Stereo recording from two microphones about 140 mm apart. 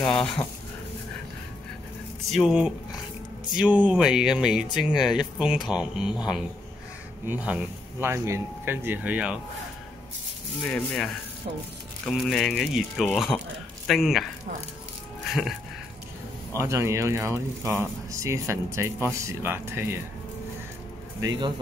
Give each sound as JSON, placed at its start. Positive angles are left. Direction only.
{"t": 0.0, "sound": "speech", "side_deg": 5}
{"t": 2.2, "sound": "speech", "side_deg": 0}
{"t": 10.6, "sound": "speech", "side_deg": 5}
{"t": 12.1, "sound": "speech", "side_deg": 5}
{"t": 15.2, "sound": "speech", "side_deg": 0}
{"t": 16.5, "sound": "speech", "side_deg": -20}
{"t": 21.2, "sound": "speech", "side_deg": -30}